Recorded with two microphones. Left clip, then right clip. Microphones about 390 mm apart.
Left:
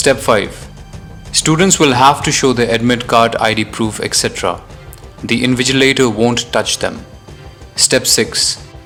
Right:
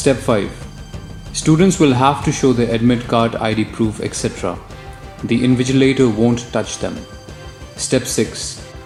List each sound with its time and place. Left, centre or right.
0.0 s speech: left